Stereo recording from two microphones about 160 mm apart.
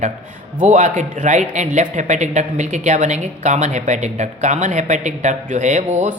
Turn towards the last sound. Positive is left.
turn(degrees=-45)  # may be behind; listen again after turning